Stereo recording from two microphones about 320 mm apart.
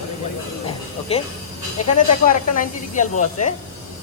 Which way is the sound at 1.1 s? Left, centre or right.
Centre.